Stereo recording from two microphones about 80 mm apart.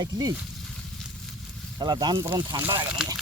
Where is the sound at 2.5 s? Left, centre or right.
Right.